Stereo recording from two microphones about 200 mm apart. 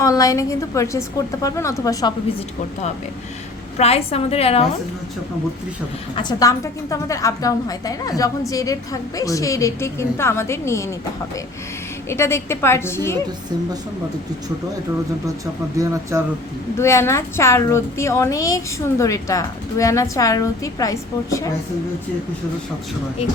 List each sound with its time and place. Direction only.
0.0 s a woman's voice: 15° left (ahead or behind)
3.8 s a woman's voice: 30° left (ahead or behind)
6.1 s a woman's voice: 20° left (ahead or behind)
12.0 s a woman's voice: 15° left (ahead or behind)
15.8 s speech: 15° right (ahead or behind)
16.7 s a woman's voice: 15° left (ahead or behind)